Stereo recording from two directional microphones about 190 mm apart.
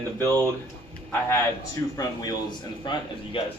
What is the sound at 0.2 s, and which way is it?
Speech, 15° left (ahead or behind).